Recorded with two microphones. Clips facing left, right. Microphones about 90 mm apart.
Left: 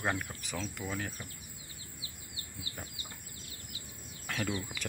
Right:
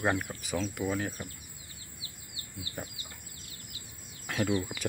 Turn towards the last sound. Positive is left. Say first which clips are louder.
# right 7 dB
turn(degrees=-15)  # may be behind; listen again after turning